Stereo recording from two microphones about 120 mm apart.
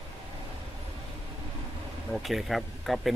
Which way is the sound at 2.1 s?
Centre (ahead or behind).